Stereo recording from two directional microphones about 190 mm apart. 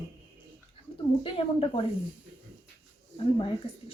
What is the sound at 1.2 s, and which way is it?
Speech, 30° left (ahead or behind).